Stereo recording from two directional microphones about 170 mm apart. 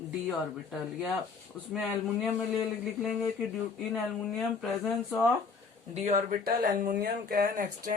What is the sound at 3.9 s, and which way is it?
Speech, centre (ahead or behind).